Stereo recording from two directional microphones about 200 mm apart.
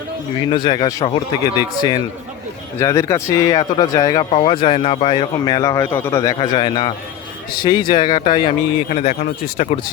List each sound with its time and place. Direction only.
0.5 s speech: 25° left (ahead or behind)
8.9 s speech: 35° left (ahead or behind)